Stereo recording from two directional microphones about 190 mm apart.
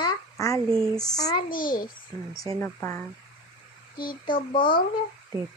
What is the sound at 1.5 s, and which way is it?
Speech, 45° left (ahead or behind).